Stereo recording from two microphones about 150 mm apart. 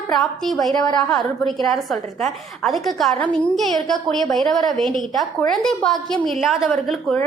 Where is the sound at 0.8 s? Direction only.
30° left (ahead or behind).